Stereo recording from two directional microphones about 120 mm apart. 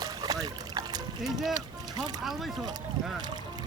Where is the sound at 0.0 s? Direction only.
30° right (ahead or behind).